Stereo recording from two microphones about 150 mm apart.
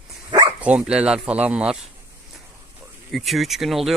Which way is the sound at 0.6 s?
10° right (ahead or behind).